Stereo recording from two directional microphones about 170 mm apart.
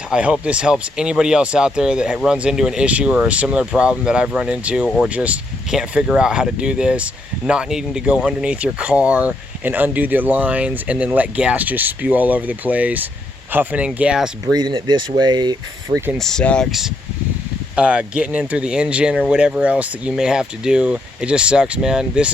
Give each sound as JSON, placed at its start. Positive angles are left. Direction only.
{"t": 0.1, "sound": "speech", "side_deg": -5}
{"t": 14.4, "sound": "speech", "side_deg": -20}
{"t": 16.1, "sound": "speech", "side_deg": 5}